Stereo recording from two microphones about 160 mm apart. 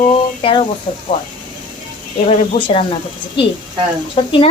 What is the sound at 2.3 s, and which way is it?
Speech, 35° left (ahead or behind).